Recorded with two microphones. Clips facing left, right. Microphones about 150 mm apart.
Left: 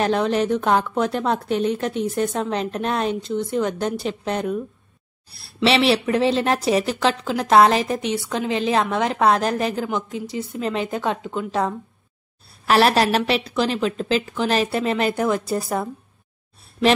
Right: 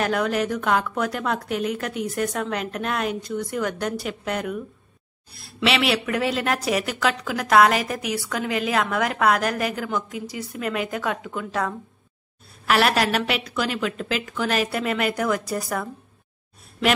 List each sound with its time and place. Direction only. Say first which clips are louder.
0.0 s a woman's voice: left 3 dB; 30° left (ahead or behind)